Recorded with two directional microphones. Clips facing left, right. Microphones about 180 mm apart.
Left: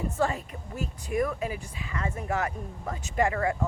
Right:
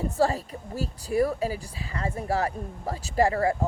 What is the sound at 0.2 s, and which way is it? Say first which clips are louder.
Speech: right 5 dB; 35° right (ahead or behind).